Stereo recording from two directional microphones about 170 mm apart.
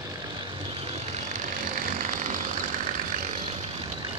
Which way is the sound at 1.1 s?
50° right (ahead or behind).